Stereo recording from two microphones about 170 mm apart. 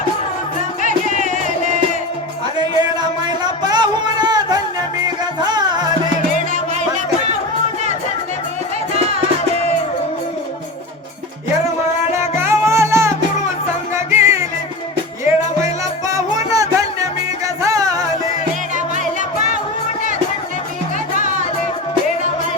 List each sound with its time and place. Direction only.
0.9 s music: 45° right (ahead or behind)
2.6 s music: 25° right (ahead or behind)
12.4 s music: 15° right (ahead or behind)
15.6 s music: 20° right (ahead or behind)